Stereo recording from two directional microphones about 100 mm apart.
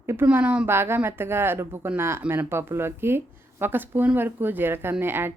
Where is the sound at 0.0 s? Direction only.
25° right (ahead or behind).